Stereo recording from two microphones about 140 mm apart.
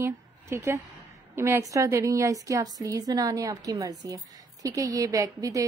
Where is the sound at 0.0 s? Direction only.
20° right (ahead or behind).